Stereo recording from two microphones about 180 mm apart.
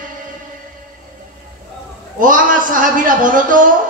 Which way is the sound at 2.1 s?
50° right (ahead or behind).